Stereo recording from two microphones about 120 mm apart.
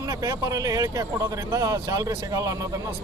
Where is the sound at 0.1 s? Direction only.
25° right (ahead or behind).